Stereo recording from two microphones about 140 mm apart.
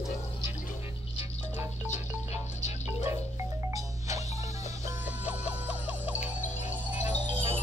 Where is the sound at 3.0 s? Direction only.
20° right (ahead or behind).